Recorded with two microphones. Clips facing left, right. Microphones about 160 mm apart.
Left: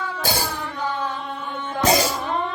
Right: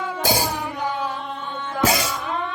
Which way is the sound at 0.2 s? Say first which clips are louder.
Right 4 dB; 15° right (ahead or behind).